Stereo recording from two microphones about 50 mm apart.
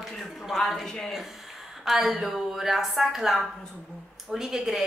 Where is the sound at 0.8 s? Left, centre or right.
Centre.